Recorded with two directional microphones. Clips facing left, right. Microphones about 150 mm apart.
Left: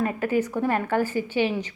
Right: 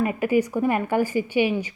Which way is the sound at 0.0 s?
10° right (ahead or behind).